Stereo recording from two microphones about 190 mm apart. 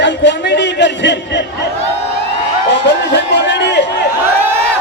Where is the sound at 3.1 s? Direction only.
65° left (ahead or behind).